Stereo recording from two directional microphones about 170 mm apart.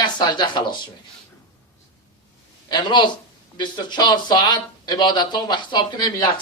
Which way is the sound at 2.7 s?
25° left (ahead or behind).